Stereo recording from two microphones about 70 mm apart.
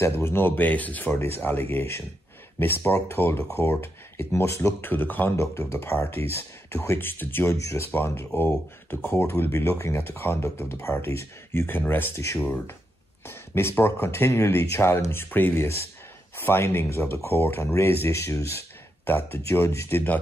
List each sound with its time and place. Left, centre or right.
0.0 s speech: left
4.8 s speech: left
5.3 s speech: left
7.5 s speech: left
7.9 s speech: left
13.2 s speech: left